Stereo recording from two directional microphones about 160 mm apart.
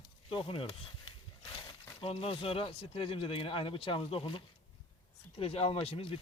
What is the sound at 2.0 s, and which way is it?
Speech, 35° left (ahead or behind).